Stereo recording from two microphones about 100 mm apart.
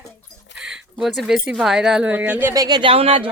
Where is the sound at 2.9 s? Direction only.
70° right (ahead or behind).